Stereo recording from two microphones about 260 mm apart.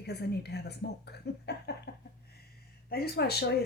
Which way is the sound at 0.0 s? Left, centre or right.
Left.